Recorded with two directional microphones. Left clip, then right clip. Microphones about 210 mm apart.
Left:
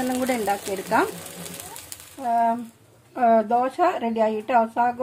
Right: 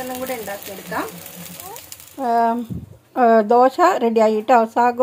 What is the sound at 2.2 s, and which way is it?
A child's voice, 45° right (ahead or behind).